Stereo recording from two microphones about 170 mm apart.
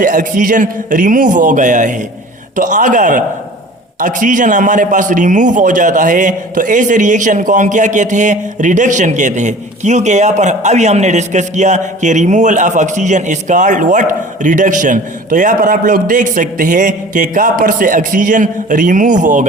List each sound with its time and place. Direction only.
0.0 s a man's voice: 50° right (ahead or behind)